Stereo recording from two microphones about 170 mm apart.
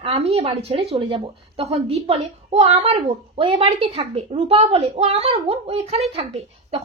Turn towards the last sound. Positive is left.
turn(degrees=-35)  # may be behind; listen again after turning